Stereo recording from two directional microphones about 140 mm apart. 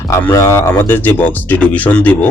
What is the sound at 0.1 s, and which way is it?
Speech, 20° left (ahead or behind).